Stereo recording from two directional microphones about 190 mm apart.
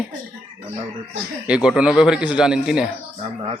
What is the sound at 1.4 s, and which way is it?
Speech, 5° right (ahead or behind).